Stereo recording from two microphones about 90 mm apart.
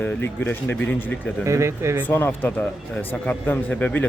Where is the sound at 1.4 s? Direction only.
30° right (ahead or behind).